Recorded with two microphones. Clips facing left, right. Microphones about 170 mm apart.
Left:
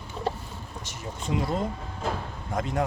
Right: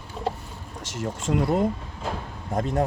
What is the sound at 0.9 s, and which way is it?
Speech, 90° right.